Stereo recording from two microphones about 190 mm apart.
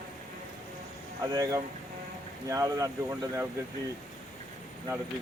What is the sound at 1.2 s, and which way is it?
Speech, 20° right (ahead or behind).